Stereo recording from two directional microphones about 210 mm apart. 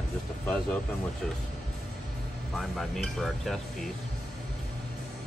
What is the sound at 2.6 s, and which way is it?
Speech, centre (ahead or behind).